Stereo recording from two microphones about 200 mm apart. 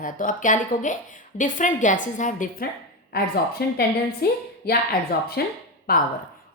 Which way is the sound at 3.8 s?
50° left (ahead or behind).